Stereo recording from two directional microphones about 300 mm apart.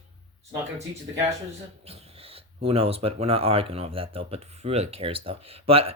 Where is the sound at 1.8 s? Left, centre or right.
Centre.